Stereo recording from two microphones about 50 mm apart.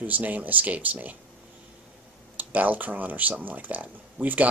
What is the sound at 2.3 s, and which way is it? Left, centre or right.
Speech, right.